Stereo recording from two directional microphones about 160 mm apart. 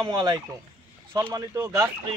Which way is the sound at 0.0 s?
25° right (ahead or behind).